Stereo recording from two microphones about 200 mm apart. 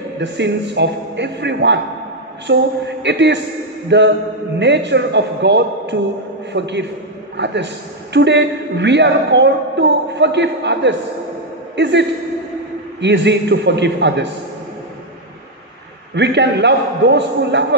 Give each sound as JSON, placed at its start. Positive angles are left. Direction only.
{"t": 0.2, "sound": "a man's voice", "side_deg": -60}
{"t": 16.2, "sound": "a man's voice", "side_deg": -60}